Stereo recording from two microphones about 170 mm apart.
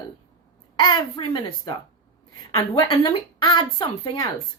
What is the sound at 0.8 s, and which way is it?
Speech, 25° left (ahead or behind).